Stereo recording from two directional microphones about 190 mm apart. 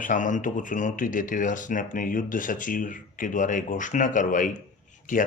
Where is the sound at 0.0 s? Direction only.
40° left (ahead or behind).